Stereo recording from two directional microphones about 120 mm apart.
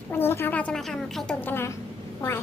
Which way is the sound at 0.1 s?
20° left (ahead or behind).